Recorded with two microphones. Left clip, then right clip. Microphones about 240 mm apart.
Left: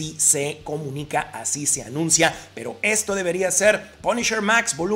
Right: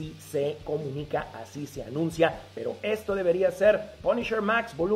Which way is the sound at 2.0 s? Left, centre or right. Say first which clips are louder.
Left 5 dB; left.